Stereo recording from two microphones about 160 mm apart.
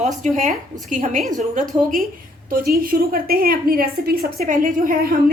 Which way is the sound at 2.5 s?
65° right (ahead or behind).